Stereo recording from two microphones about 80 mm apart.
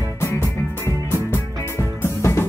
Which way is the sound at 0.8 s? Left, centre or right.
Left.